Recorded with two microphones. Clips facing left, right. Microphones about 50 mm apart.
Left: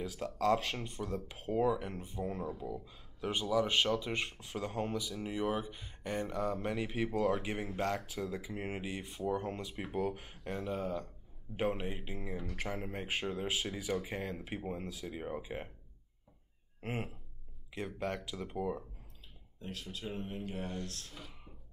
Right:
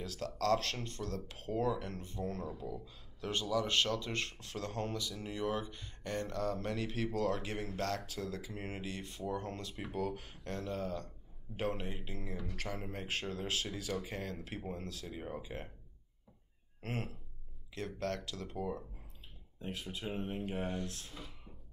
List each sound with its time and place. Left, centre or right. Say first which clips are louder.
0.0 s speech: left 3 dB; centre
16.8 s speech: left 1 dB; centre
19.6 s speech: right 1 dB; right
21.1 s speech: right 1 dB; centre